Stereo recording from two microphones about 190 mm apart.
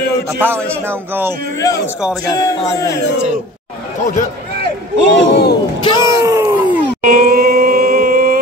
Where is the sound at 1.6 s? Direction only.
15° left (ahead or behind).